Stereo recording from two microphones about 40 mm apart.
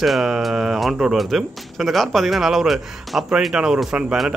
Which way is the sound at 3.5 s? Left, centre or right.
Centre.